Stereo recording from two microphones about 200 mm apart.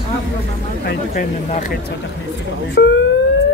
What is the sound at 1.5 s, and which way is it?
Speech, 35° left (ahead or behind).